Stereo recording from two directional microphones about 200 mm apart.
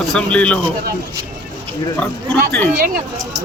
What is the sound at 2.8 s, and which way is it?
Speech, 50° right (ahead or behind).